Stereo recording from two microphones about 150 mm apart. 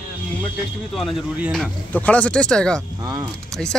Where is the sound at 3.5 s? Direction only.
5° left (ahead or behind).